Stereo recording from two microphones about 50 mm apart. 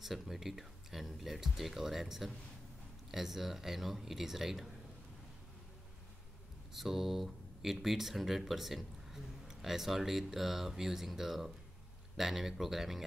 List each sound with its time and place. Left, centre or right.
0.0 s speech: centre
6.7 s speech: centre